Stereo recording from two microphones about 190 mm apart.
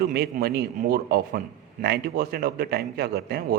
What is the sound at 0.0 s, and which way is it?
A man's voice, 55° right (ahead or behind).